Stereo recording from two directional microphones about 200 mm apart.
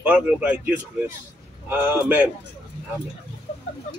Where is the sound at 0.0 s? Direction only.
10° right (ahead or behind).